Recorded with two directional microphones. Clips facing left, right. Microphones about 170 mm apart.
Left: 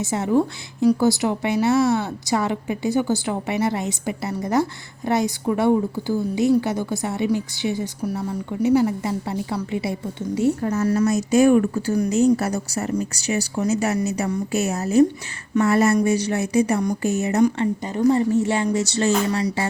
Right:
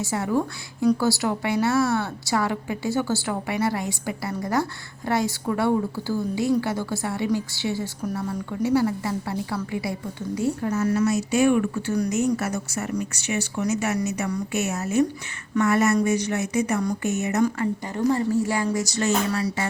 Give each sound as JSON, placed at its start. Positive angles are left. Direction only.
{"t": 0.0, "sound": "speech", "side_deg": 20}
{"t": 10.6, "sound": "a woman's voice", "side_deg": 45}
{"t": 17.4, "sound": "speech", "side_deg": 20}